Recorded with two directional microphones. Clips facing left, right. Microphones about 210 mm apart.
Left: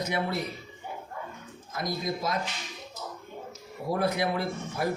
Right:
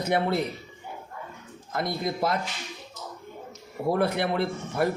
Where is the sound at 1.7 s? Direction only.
60° right (ahead or behind).